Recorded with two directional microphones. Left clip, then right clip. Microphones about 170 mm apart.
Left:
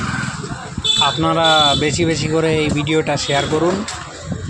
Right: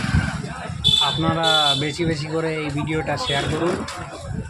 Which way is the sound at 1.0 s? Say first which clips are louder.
Left 5 dB; 35° left (ahead or behind).